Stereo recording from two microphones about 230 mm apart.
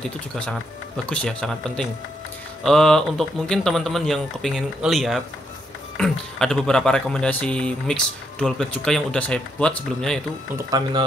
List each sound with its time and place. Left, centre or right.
1.0 s speech: centre
10.5 s speech: centre